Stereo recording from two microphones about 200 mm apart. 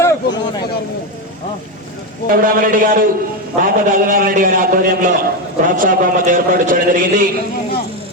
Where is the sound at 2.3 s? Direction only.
45° right (ahead or behind).